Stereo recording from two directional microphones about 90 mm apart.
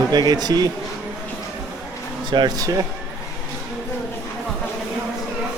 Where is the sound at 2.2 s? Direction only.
55° right (ahead or behind).